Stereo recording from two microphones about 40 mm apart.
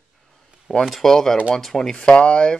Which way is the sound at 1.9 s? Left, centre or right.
Left.